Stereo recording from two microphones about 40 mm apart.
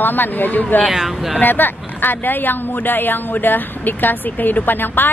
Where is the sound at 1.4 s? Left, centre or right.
Left.